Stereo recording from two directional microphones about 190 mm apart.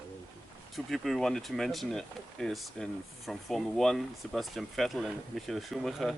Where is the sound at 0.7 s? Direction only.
Centre (ahead or behind).